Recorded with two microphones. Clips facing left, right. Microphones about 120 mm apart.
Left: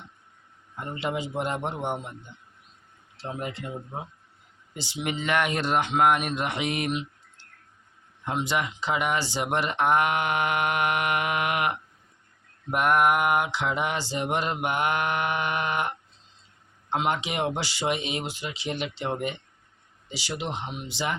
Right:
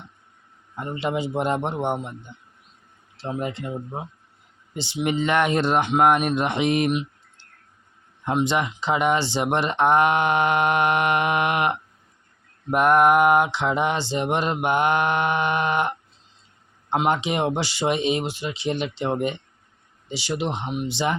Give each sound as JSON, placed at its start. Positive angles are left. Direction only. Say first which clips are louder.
{"t": 0.8, "sound": "speech", "louder": "right 4 dB", "side_deg": -25}
{"t": 3.2, "sound": "speech", "louder": "right 5 dB", "side_deg": -25}
{"t": 8.2, "sound": "speech", "louder": "right 5 dB", "side_deg": -25}